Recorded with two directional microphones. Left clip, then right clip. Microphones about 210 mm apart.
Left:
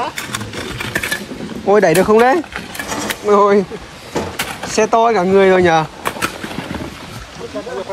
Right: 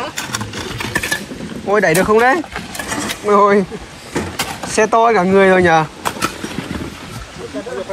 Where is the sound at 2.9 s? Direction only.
15° left (ahead or behind).